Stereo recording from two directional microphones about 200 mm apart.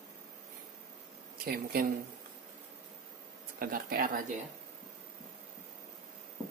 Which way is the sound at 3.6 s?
45° right (ahead or behind).